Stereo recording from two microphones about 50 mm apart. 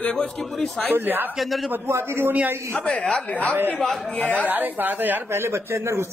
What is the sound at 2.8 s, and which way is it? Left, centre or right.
Speech, centre.